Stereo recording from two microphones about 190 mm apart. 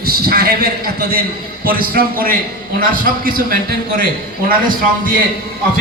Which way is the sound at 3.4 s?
50° right (ahead or behind).